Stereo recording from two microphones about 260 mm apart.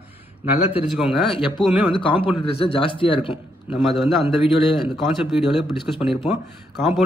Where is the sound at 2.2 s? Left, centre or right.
Left.